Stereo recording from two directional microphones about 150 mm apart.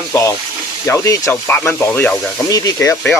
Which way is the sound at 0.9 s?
15° left (ahead or behind).